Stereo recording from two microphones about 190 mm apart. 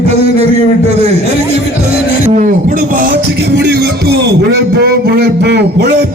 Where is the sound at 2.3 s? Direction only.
40° right (ahead or behind).